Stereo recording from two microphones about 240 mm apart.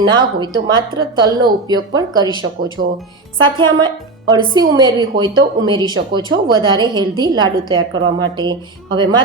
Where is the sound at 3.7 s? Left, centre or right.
Centre.